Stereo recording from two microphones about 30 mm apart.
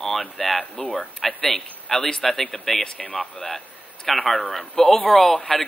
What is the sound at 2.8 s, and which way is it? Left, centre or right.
Speech, left.